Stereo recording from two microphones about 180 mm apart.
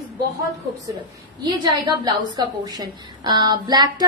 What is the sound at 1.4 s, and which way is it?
A woman's voice, 25° right (ahead or behind).